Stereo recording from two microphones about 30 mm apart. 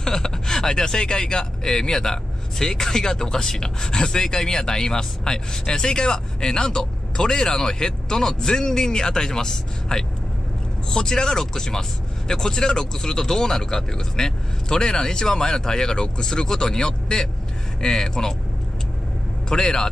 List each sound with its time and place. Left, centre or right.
0.0 s speech: left
19.5 s speech: left